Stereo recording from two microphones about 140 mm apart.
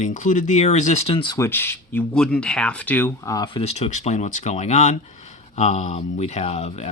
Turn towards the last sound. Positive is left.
turn(degrees=50)  # may be behind; listen again after turning